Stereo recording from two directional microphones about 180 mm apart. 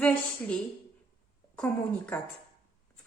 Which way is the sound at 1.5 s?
10° left (ahead or behind).